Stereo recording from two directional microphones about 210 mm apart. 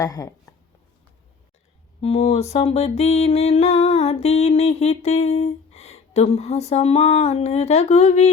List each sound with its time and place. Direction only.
0.0 s speech: 15° left (ahead or behind)
2.0 s music: 30° left (ahead or behind)